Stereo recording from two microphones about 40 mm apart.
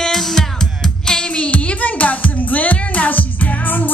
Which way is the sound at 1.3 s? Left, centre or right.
Left.